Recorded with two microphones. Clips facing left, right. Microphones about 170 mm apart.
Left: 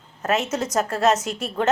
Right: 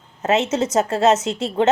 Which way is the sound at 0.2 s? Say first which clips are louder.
Right 4 dB; 25° right (ahead or behind).